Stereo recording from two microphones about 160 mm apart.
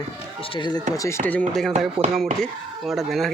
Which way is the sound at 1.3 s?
5° left (ahead or behind).